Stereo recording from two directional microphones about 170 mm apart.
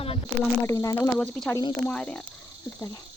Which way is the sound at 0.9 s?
10° left (ahead or behind).